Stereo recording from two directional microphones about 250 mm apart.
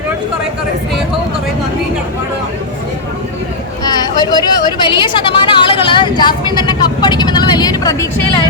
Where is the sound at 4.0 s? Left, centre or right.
Centre.